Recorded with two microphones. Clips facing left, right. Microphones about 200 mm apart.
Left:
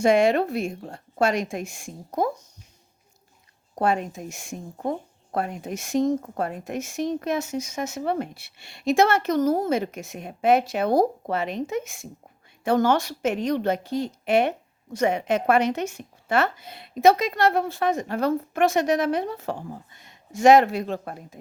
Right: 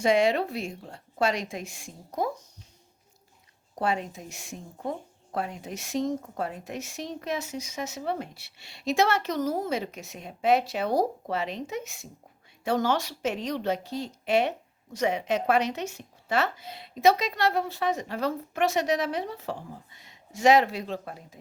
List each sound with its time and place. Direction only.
0.0 s speech: 50° left (ahead or behind)
3.8 s speech: 50° left (ahead or behind)